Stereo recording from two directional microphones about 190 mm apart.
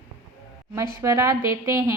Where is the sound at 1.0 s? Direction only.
15° right (ahead or behind).